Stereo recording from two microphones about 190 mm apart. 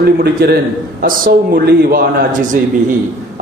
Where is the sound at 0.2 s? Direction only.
55° right (ahead or behind).